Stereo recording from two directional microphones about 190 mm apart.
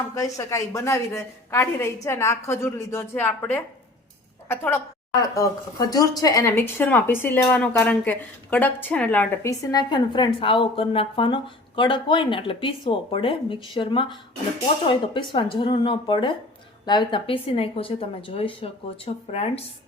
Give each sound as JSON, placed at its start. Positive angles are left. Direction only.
{"t": 0.1, "sound": "a woman's voice", "side_deg": 15}